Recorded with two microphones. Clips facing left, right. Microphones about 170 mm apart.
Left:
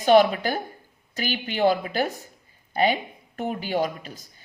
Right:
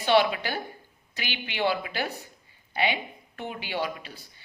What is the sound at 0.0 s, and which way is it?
Speech, 45° left (ahead or behind).